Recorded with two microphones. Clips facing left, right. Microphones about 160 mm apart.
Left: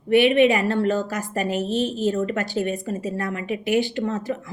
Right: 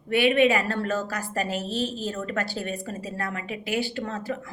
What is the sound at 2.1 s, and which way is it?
A woman's voice, 20° left (ahead or behind).